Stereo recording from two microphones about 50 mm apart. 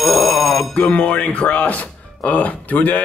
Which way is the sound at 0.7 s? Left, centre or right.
Left.